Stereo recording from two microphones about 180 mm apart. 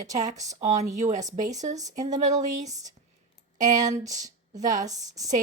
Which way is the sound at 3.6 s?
45° right (ahead or behind).